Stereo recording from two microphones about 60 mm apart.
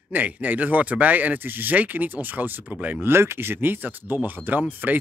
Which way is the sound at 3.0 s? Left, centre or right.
Right.